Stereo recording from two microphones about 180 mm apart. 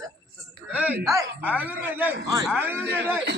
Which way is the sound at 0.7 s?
10° right (ahead or behind).